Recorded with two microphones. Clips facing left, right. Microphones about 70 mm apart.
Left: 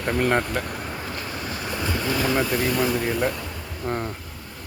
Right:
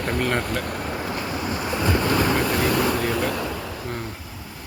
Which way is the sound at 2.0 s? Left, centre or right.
Right.